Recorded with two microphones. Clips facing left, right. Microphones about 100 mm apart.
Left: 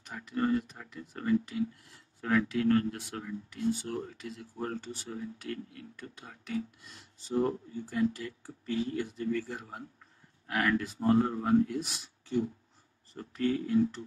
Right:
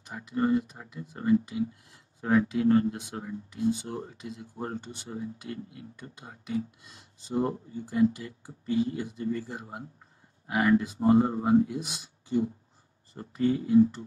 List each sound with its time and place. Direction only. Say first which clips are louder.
0.1 s speech: right 3 dB; 15° right (ahead or behind)